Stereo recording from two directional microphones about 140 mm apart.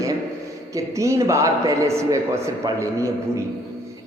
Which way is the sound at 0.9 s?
20° right (ahead or behind).